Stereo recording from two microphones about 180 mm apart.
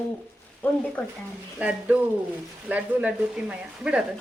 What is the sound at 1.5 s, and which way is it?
Speech, 5° right (ahead or behind).